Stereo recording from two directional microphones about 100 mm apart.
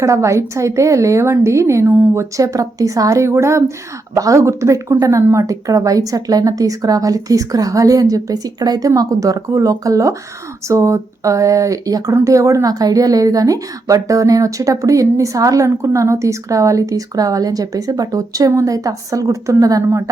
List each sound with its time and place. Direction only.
0.0 s a woman's voice: 30° right (ahead or behind)
2.3 s speech: 35° right (ahead or behind)